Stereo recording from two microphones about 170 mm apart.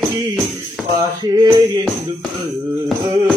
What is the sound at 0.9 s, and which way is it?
Music, 25° right (ahead or behind).